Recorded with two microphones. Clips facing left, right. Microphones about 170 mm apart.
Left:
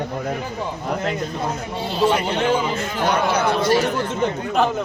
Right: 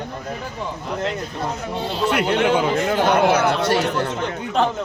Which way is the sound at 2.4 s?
70° right (ahead or behind).